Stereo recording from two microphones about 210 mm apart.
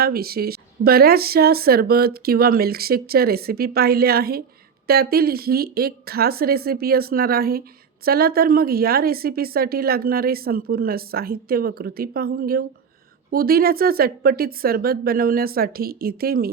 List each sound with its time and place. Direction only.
0.0 s speech: 45° right (ahead or behind)